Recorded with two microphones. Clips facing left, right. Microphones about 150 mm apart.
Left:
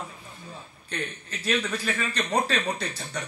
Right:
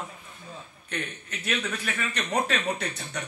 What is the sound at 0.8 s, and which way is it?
A man's voice, 35° left (ahead or behind).